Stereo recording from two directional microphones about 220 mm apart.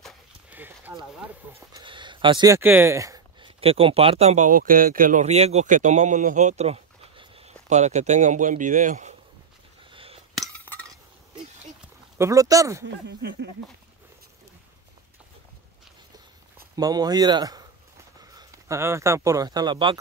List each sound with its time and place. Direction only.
0.0 s clip-clop: 10° right (ahead or behind)
1.7 s speech: 20° right (ahead or behind)
3.6 s speech: 25° right (ahead or behind)
9.8 s a sound: 25° right (ahead or behind)
10.3 s cutlery: 5° left (ahead or behind)
12.2 s speech: 15° right (ahead or behind)
12.8 s speech: 50° right (ahead or behind)
16.7 s speech: 15° right (ahead or behind)